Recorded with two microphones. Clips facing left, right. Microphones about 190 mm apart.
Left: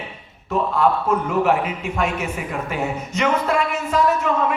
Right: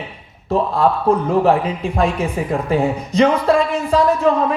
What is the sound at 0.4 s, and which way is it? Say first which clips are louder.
A man's voice: right 3 dB; 35° right (ahead or behind).